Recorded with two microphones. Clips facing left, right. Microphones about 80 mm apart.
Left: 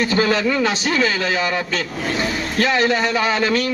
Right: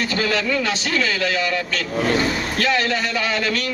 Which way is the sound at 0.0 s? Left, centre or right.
Left.